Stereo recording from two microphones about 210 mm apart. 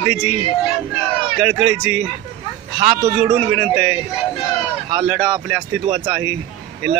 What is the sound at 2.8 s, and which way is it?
Speech, 25° right (ahead or behind).